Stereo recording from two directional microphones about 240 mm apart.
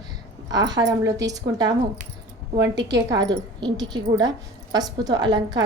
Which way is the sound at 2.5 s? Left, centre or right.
Right.